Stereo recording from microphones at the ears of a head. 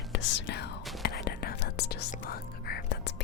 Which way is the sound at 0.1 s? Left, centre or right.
Left.